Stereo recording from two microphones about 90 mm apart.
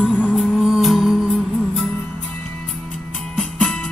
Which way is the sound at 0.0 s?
15° left (ahead or behind).